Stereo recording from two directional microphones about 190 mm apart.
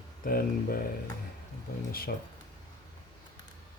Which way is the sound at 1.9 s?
50° left (ahead or behind).